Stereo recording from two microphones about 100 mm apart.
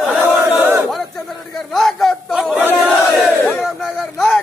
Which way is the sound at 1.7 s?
5° left (ahead or behind).